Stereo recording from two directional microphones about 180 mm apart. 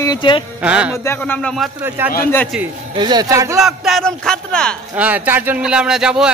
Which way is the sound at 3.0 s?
25° right (ahead or behind).